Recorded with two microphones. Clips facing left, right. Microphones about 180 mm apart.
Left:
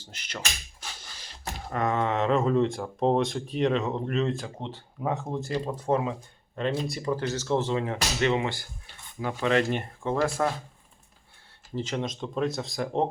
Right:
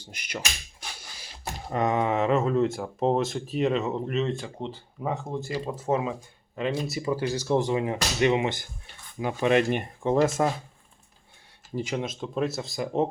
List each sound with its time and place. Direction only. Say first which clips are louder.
0.0 s a sound: right 2 dB; 15° right (ahead or behind)
1.7 s speech: right 2 dB; 20° right (ahead or behind)
11.7 s speech: right 1 dB; 10° right (ahead or behind)